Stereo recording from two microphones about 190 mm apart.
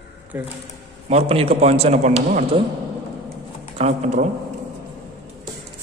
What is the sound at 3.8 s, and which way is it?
Speech, 35° right (ahead or behind).